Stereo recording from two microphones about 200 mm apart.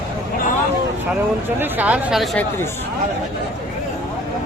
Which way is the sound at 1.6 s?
10° right (ahead or behind).